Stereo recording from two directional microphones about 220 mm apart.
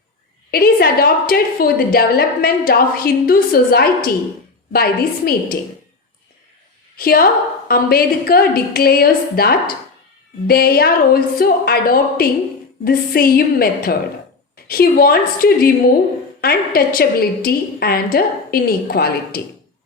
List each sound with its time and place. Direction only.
0.5 s a woman's voice: 45° left (ahead or behind)
6.9 s a woman's voice: 40° left (ahead or behind)